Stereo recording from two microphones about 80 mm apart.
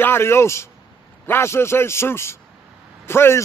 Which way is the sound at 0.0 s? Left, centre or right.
Left.